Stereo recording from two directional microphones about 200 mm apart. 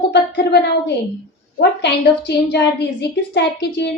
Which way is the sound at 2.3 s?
60° left (ahead or behind).